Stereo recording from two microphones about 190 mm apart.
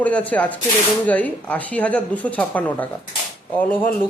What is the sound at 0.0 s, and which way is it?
Speech, 10° left (ahead or behind).